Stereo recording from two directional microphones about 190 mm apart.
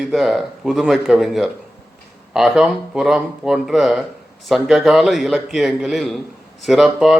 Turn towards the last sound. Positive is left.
turn(degrees=0)  # may be behind; listen again after turning